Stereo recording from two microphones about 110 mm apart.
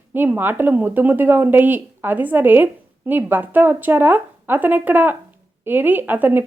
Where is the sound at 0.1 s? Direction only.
20° right (ahead or behind).